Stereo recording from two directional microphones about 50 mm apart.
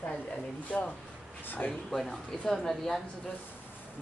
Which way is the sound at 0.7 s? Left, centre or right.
Centre.